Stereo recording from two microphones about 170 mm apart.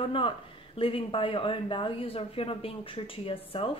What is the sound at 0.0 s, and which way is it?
Speech, 30° left (ahead or behind).